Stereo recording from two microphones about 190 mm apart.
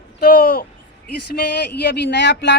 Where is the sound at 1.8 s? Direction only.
65° left (ahead or behind).